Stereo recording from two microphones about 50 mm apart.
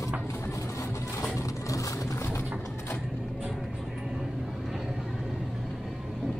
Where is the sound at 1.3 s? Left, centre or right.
Left.